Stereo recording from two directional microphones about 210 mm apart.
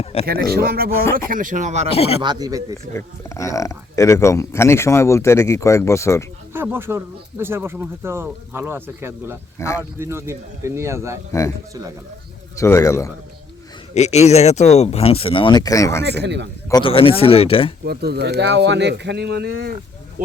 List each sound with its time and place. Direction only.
0.0 s speech: 30° left (ahead or behind)
0.5 s speech: 45° right (ahead or behind)
1.9 s speech: 30° left (ahead or behind)
2.2 s speech: 20° right (ahead or behind)
2.9 s speech: 15° left (ahead or behind)
6.5 s speech: 10° right (ahead or behind)
9.6 s speech: 15° left (ahead or behind)
10.0 s speech: 10° right (ahead or behind)
12.5 s speech: 15° left (ahead or behind)
13.9 s speech: 30° left (ahead or behind); by 16.0 s 15° left (ahead or behind)
16.0 s speech: 55° right (ahead or behind)
16.6 s speech: 20° left (ahead or behind)
17.8 s speech: 50° right (ahead or behind)